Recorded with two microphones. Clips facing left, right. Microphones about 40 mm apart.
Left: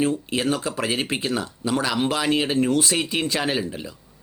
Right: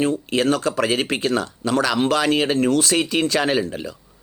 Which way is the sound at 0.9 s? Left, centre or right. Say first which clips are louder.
Right 4 dB; right.